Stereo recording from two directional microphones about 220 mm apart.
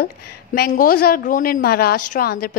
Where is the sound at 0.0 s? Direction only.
40° left (ahead or behind).